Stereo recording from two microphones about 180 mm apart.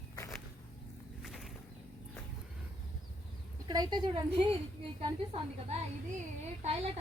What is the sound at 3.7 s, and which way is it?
Speech, 25° right (ahead or behind).